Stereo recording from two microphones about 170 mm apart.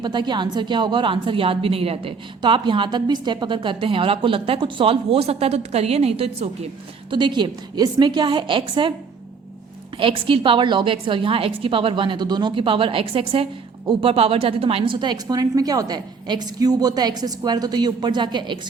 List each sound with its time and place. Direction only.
0.0 s a woman's voice: 25° right (ahead or behind)
10.0 s a woman's voice: 30° right (ahead or behind)